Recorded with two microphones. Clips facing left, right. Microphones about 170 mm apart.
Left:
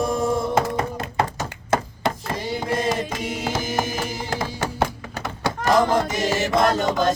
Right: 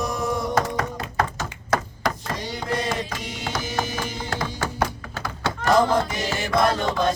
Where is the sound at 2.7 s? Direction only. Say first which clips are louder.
Left 2 dB; 25° left (ahead or behind).